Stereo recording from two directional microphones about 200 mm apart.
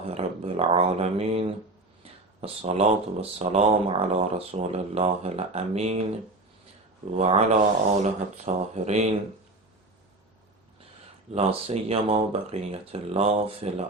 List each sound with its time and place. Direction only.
0.1 s speech: 30° right (ahead or behind)
7.2 s speech: 30° right (ahead or behind)
11.3 s speech: 30° right (ahead or behind)